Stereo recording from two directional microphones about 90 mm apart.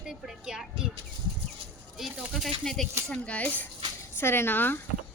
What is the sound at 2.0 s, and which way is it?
Speech, centre (ahead or behind).